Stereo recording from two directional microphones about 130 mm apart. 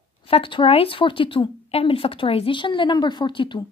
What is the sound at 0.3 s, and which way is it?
Speech, 40° left (ahead or behind).